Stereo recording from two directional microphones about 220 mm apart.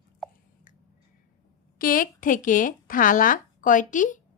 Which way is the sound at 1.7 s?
40° left (ahead or behind).